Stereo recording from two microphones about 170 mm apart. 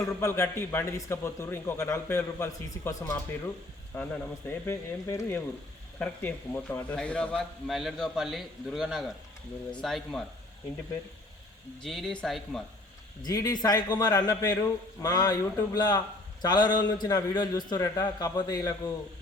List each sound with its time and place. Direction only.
0.2 s a man's voice: 15° left (ahead or behind)
11.8 s a man's voice: centre (ahead or behind)
13.2 s a man's voice: 20° left (ahead or behind)